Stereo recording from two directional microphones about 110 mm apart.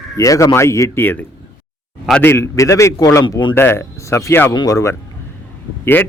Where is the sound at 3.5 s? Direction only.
20° left (ahead or behind).